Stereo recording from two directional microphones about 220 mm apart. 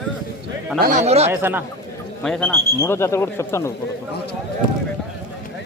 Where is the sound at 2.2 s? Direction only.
5° left (ahead or behind).